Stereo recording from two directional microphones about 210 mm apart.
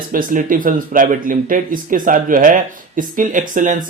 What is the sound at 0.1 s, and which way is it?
Speech, 40° right (ahead or behind).